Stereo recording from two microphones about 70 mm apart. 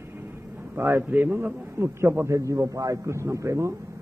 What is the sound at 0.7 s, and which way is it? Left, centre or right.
A man's voice, right.